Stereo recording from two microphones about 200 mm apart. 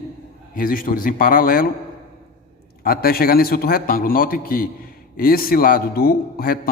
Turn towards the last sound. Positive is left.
turn(degrees=45)  # may be behind; listen again after turning